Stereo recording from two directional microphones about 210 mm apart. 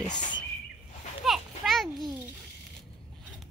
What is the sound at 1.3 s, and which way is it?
Children playing, centre (ahead or behind).